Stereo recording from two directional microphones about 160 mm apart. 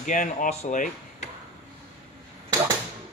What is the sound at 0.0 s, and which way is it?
Speech, 55° left (ahead or behind).